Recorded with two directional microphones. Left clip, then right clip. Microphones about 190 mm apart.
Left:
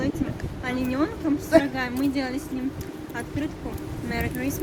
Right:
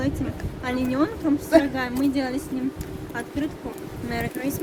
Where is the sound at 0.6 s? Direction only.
25° right (ahead or behind).